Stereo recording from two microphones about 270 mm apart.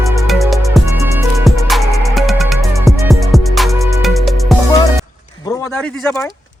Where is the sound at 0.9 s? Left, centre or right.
Centre.